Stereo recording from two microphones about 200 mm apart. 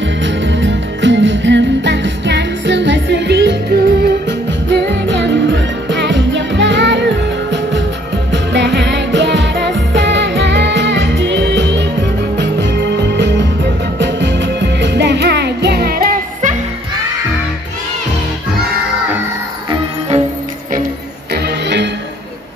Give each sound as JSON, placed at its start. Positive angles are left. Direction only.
{"t": 0.2, "sound": "music", "side_deg": -65}
{"t": 21.3, "sound": "music", "side_deg": -60}